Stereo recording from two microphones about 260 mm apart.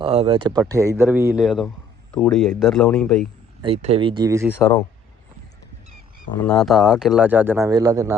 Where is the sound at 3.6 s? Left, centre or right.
Right.